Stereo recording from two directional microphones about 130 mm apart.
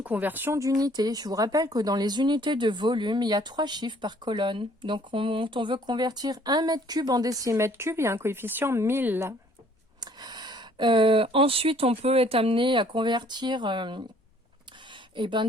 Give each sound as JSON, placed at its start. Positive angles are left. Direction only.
{"t": 0.0, "sound": "speech", "side_deg": -15}
{"t": 10.0, "sound": "speech", "side_deg": -35}
{"t": 15.1, "sound": "speech", "side_deg": -40}